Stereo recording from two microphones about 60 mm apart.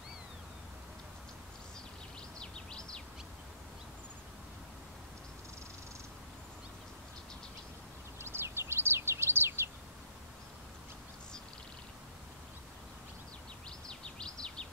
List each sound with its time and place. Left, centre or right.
2.3 s bird vocalization: centre
8.2 s bird: right
13.8 s bird vocalization: centre